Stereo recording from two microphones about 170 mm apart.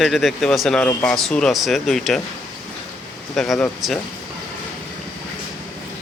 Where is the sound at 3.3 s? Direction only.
Centre (ahead or behind).